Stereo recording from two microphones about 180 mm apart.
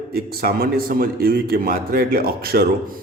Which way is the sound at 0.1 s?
55° right (ahead or behind).